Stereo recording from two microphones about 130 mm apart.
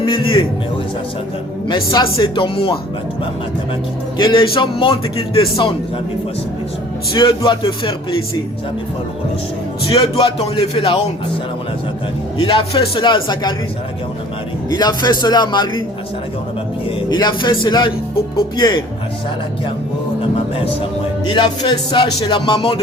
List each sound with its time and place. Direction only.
0.0 s a man's voice: 40° left (ahead or behind)
1.6 s music: 35° left (ahead or behind)
4.2 s music: 40° left (ahead or behind)
7.4 s music: 40° left (ahead or behind)
10.0 s speech: 40° left (ahead or behind)
12.4 s music: 40° left (ahead or behind)
14.7 s music: 30° left (ahead or behind)
17.1 s music: 35° left (ahead or behind)
21.2 s music: 35° left (ahead or behind)